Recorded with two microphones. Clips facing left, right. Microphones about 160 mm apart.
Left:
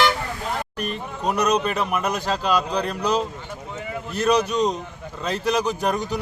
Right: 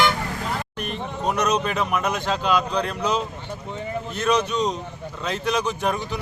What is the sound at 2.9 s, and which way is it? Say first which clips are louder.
A man's voice: left 2 dB; 35° left (ahead or behind).